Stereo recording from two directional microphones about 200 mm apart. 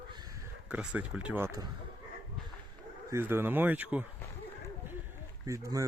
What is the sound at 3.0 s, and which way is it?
Speech, 10° right (ahead or behind).